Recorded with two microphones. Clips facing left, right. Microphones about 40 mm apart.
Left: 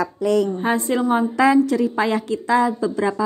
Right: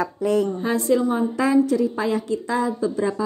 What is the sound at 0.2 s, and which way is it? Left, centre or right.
Speech, left.